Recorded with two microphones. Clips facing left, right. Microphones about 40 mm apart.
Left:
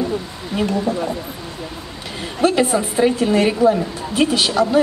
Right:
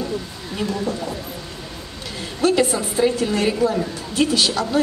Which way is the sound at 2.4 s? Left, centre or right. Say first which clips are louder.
Left 2 dB; left.